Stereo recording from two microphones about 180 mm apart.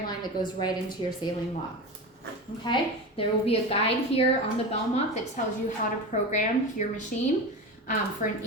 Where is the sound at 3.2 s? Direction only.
30° left (ahead or behind).